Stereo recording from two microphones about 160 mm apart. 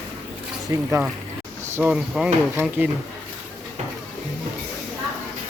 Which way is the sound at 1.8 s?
10° right (ahead or behind).